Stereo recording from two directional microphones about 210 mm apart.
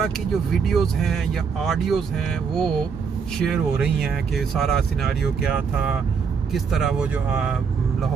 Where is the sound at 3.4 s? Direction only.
Centre (ahead or behind).